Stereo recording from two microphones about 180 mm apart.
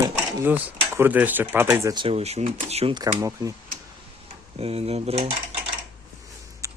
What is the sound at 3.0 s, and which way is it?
Speech, 20° right (ahead or behind).